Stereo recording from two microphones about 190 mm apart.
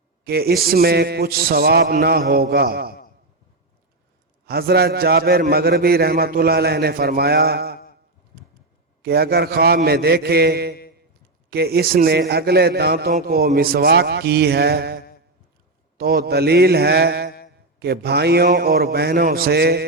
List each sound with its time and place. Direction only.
0.3 s a man's voice: 55° right (ahead or behind)
4.4 s a man's voice: 55° right (ahead or behind)
9.0 s a man's voice: 55° right (ahead or behind)
16.0 s a man's voice: 55° right (ahead or behind)